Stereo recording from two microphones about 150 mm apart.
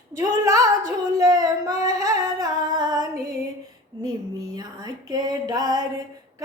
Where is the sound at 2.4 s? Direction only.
25° right (ahead or behind).